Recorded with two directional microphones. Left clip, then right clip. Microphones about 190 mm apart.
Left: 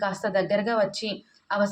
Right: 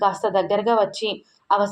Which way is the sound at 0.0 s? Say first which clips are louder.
Right 6 dB; 15° right (ahead or behind).